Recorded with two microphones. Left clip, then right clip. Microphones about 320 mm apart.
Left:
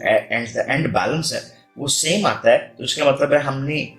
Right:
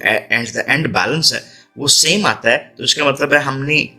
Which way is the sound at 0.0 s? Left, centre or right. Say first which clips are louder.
Right 3 dB; right.